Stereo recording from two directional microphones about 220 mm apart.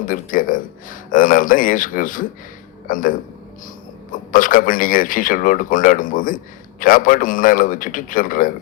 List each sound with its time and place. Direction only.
0.0 s speech: 40° left (ahead or behind)